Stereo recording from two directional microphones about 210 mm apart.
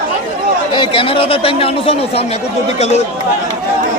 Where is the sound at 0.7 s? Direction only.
25° left (ahead or behind).